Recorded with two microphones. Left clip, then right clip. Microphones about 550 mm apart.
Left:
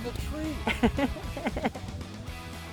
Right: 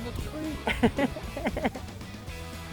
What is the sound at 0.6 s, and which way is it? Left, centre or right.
Music, centre.